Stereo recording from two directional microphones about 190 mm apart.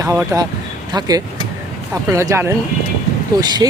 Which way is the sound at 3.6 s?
20° right (ahead or behind).